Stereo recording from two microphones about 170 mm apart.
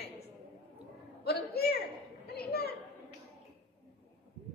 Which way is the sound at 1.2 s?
65° left (ahead or behind).